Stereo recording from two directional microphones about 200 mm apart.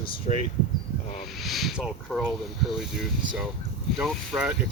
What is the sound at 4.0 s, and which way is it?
Speech, centre (ahead or behind).